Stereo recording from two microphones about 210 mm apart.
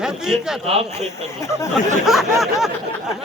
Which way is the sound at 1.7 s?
Centre (ahead or behind).